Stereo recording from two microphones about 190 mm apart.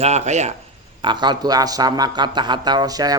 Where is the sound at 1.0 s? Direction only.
25° right (ahead or behind).